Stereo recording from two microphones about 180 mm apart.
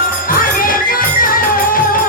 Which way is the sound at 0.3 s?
50° left (ahead or behind).